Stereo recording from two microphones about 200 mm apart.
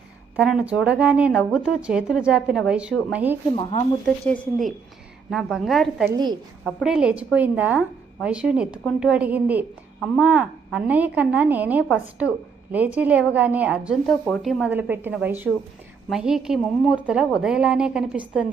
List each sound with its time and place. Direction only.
0.3 s speech: 5° right (ahead or behind)
3.5 s speech: 30° left (ahead or behind)
4.0 s speech: centre (ahead or behind)
6.1 s a woman's voice: 20° right (ahead or behind)
6.8 s a woman's voice: 5° right (ahead or behind)